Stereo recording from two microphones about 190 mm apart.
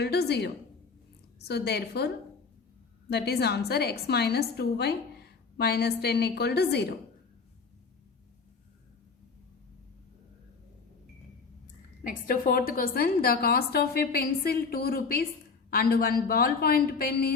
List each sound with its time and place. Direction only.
0.0 s a woman's voice: 60° left (ahead or behind)
3.1 s a woman's voice: 55° left (ahead or behind)
12.0 s a woman's voice: 50° left (ahead or behind)